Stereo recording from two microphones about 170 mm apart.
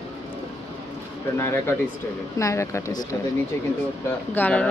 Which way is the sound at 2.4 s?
15° left (ahead or behind).